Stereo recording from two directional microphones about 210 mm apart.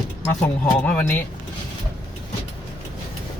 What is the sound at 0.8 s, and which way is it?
Speech, 10° left (ahead or behind).